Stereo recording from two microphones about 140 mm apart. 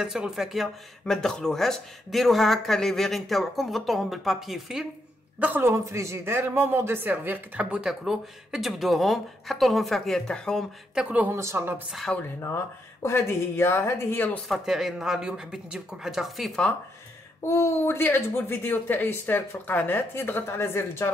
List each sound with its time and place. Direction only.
0.0 s a man's voice: 5° right (ahead or behind)
5.4 s a man's voice: 15° right (ahead or behind); by 10.6 s 5° left (ahead or behind)
11.0 s speech: 10° right (ahead or behind)
11.9 s a man's voice: 5° left (ahead or behind)
13.0 s a woman's voice: 20° left (ahead or behind)
14.5 s a man's voice: 5° right (ahead or behind)
17.4 s a woman's voice: 20° left (ahead or behind)